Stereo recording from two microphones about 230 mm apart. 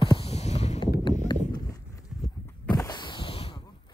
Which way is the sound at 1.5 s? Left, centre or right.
Centre.